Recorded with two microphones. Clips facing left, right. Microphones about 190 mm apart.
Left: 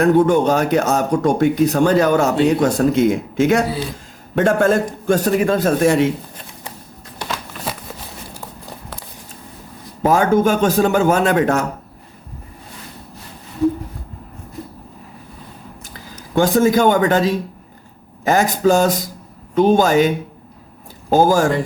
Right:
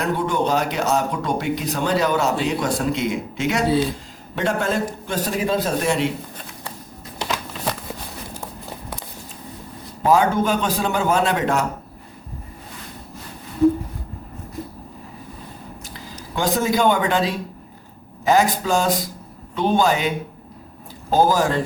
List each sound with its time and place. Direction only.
0.0 s speech: 50° left (ahead or behind)
7.3 s a sound: 5° left (ahead or behind)
10.1 s speech: 45° left (ahead or behind)
16.3 s speech: 50° left (ahead or behind)